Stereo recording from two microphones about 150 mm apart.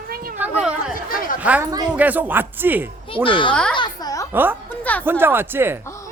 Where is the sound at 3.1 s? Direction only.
35° left (ahead or behind).